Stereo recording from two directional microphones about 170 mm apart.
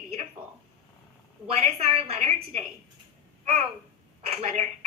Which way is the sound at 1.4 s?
35° right (ahead or behind).